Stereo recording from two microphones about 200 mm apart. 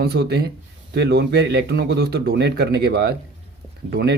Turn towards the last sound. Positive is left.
turn(degrees=-55)  # may be behind; listen again after turning